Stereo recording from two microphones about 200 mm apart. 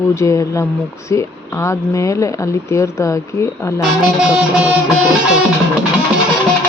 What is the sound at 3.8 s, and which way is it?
Music, 5° right (ahead or behind).